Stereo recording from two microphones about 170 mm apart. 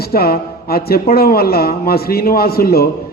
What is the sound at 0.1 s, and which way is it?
Speech, 65° left (ahead or behind).